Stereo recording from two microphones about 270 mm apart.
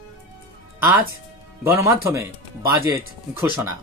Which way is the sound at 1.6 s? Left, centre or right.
Centre.